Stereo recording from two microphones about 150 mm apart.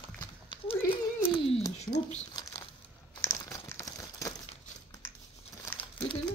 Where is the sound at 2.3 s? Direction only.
25° left (ahead or behind).